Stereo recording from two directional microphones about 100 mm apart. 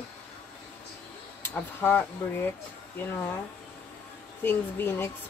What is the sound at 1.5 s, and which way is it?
Speech, 20° left (ahead or behind).